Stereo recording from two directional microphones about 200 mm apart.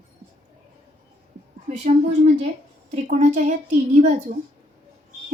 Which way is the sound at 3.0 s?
40° right (ahead or behind).